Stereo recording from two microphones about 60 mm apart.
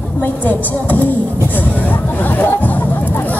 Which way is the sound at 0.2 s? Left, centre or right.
Left.